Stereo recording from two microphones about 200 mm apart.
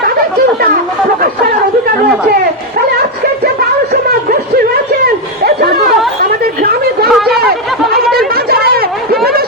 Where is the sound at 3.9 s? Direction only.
50° right (ahead or behind).